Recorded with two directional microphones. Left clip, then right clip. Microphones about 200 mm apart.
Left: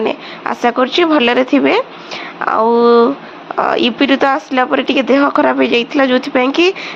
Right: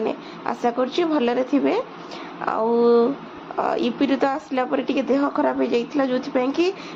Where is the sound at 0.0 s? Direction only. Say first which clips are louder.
Left 8 dB; 15° left (ahead or behind).